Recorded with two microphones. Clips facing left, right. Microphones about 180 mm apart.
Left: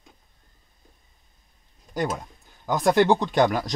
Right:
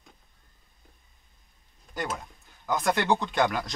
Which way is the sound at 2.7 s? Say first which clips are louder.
Left 6 dB; 35° left (ahead or behind).